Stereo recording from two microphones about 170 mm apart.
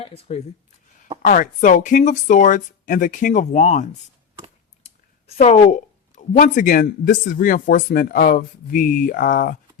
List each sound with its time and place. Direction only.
0.0 s speech: 35° left (ahead or behind)
1.2 s speech: 50° left (ahead or behind)
5.2 s speech: 40° left (ahead or behind)